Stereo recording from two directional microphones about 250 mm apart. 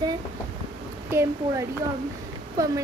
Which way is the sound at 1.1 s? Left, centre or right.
Centre.